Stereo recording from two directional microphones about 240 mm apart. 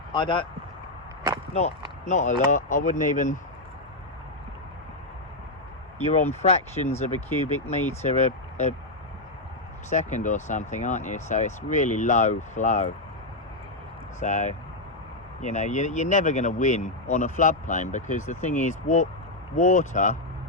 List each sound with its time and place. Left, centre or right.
0.1 s speech: centre
1.5 s speech: left
6.1 s speech: left
9.9 s speech: left
14.2 s speech: left